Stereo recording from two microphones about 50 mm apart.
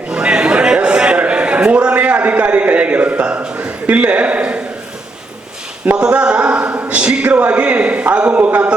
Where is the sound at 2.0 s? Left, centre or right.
Right.